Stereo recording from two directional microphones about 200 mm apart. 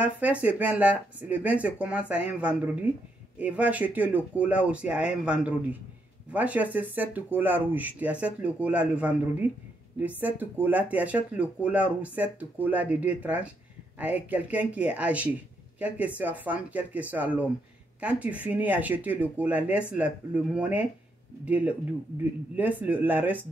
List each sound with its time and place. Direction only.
0.0 s speech: 5° right (ahead or behind)